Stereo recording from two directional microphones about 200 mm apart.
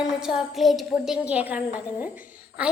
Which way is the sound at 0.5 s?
Centre (ahead or behind).